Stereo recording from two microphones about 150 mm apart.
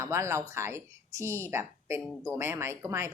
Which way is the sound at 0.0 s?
20° right (ahead or behind).